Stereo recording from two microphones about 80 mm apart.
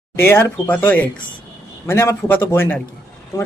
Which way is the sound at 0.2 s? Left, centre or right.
Left.